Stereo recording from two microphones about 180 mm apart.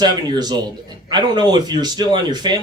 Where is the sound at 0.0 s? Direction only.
25° right (ahead or behind).